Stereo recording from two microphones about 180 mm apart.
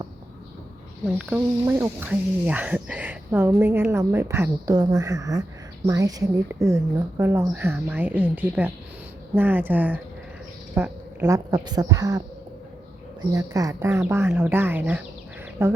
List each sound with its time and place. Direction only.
1.0 s speech: 5° right (ahead or behind)
10.8 s a sound: 10° right (ahead or behind)
11.5 s a woman's voice: 20° right (ahead or behind)
13.3 s speech: 20° right (ahead or behind)